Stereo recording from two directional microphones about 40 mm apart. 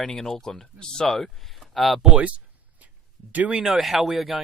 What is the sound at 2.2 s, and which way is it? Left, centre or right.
Speech, right.